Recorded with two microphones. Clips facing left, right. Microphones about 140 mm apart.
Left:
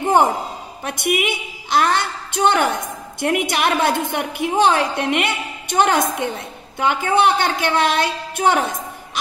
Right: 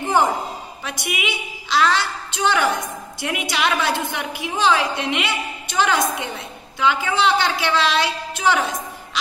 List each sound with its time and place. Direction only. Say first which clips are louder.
0.8 s a woman's voice: left 7 dB; 55° left (ahead or behind)